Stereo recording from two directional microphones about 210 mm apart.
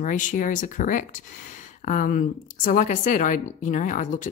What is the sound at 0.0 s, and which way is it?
Speech, 35° left (ahead or behind).